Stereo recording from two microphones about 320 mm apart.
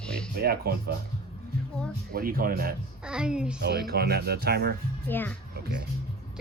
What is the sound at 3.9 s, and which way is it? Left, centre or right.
Speech, right.